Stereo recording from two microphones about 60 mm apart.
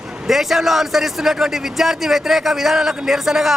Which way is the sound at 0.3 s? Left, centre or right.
Centre.